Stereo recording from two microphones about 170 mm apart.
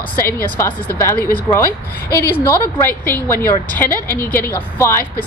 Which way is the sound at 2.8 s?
10° left (ahead or behind).